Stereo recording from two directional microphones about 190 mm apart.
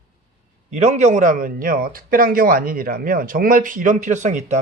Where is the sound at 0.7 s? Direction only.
35° right (ahead or behind).